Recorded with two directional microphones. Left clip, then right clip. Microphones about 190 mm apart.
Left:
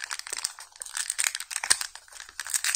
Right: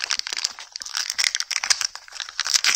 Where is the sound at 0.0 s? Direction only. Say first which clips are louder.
Right 9 dB; 20° right (ahead or behind).